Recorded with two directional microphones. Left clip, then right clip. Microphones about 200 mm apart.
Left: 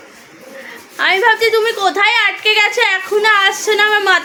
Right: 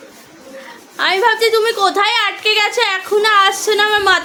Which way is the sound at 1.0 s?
Centre (ahead or behind).